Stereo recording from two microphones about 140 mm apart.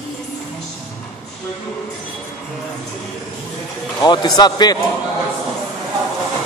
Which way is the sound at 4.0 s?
30° left (ahead or behind).